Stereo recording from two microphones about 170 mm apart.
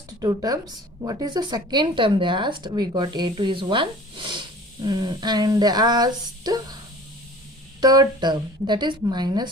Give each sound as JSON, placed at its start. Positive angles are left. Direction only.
{"t": 0.2, "sound": "speech", "side_deg": -20}
{"t": 7.8, "sound": "speech", "side_deg": -25}